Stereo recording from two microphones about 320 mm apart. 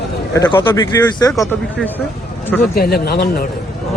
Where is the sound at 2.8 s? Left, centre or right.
Left.